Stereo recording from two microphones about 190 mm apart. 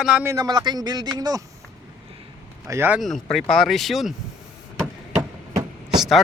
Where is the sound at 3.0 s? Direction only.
Centre (ahead or behind).